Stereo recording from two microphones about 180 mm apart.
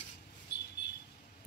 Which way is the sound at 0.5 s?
70° left (ahead or behind).